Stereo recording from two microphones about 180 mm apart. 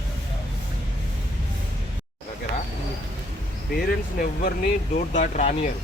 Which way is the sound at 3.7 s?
55° left (ahead or behind).